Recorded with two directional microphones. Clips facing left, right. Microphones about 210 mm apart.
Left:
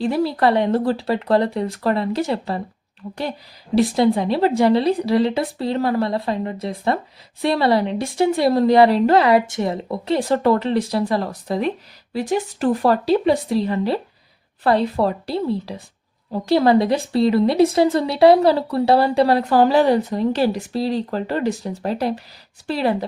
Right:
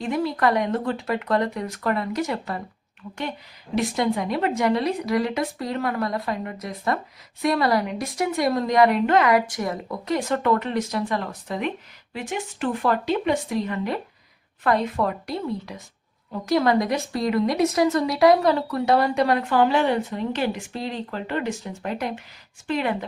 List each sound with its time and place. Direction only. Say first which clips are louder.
0.0 s a woman's voice: left 4 dB; 35° left (ahead or behind)
3.8 s a woman's voice: left 7 dB; 30° left (ahead or behind)